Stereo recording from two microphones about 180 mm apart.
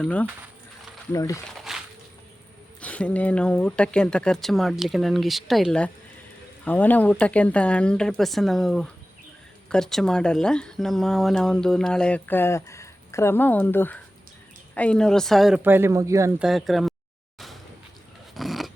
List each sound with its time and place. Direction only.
0.0 s speech: 10° left (ahead or behind)
1.1 s speech: 20° left (ahead or behind)
1.5 s a sound: centre (ahead or behind)
2.8 s speech: 10° left (ahead or behind); by 16.3 s 15° right (ahead or behind)
16.4 s speech: centre (ahead or behind)
18.3 s filing: centre (ahead or behind)